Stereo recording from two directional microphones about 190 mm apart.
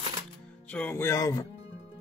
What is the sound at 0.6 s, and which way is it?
Speech, 10° left (ahead or behind).